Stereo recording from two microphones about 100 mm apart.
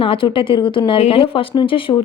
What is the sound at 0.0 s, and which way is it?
A woman's voice, 65° left (ahead or behind).